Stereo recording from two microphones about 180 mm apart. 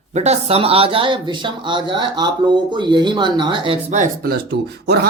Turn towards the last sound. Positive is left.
turn(degrees=-65)  # may be behind; listen again after turning